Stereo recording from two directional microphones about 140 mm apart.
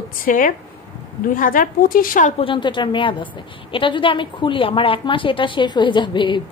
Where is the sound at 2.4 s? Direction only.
35° left (ahead or behind).